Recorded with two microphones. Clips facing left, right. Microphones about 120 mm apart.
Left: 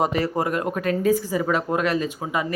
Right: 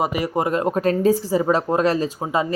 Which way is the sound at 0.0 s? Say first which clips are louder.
Right 1 dB; 10° right (ahead or behind).